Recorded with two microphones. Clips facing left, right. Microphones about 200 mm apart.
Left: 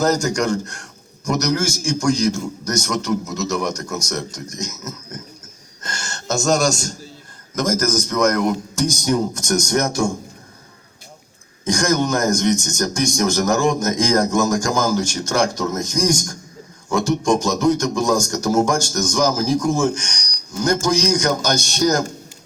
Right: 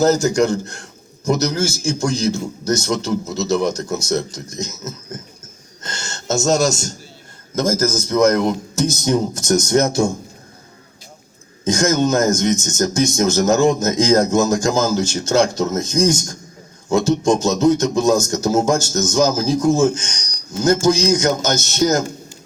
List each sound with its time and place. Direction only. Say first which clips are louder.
0.0 s a man's voice: right 4 dB; 25° right (ahead or behind)
11.6 s a man's voice: right 2 dB; 20° right (ahead or behind)